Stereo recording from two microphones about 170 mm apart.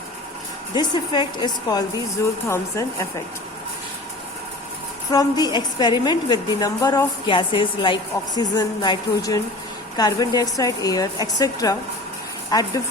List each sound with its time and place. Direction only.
0.7 s a woman's voice: 25° left (ahead or behind)
5.1 s a woman's voice: 25° left (ahead or behind)